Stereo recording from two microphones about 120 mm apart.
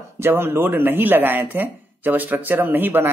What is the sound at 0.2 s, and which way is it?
Speech, 20° right (ahead or behind).